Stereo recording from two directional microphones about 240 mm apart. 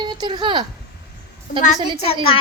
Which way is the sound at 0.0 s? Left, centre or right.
Centre.